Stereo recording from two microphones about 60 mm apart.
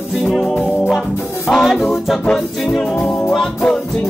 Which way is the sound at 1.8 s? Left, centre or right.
Centre.